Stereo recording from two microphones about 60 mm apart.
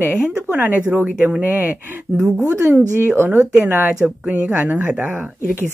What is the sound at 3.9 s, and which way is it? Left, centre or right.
Speech, centre.